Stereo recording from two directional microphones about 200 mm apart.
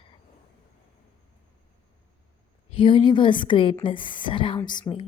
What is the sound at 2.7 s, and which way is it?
A woman's voice, 25° left (ahead or behind).